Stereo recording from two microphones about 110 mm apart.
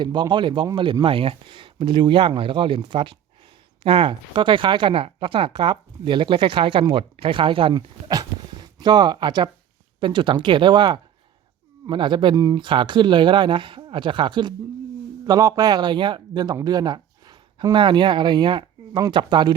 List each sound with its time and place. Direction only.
0.0 s speech: 45° right (ahead or behind)
1.0 s speech: 55° right (ahead or behind)
7.7 s speech: 40° right (ahead or behind)
12.4 s speech: 35° right (ahead or behind)
12.6 s speech: 45° right (ahead or behind)
15.3 s speech: 35° right (ahead or behind)